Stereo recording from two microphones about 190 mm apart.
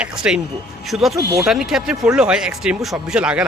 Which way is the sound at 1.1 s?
15° right (ahead or behind).